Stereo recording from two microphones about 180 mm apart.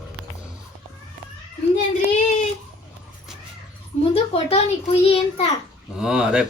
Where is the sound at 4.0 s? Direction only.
35° left (ahead or behind).